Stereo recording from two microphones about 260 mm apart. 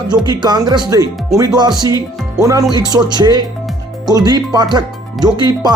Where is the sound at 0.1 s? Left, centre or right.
Centre.